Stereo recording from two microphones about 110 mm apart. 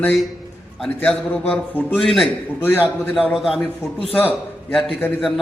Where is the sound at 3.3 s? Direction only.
Centre (ahead or behind).